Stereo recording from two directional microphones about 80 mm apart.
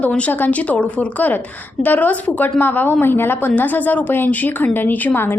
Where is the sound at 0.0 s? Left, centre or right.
Centre.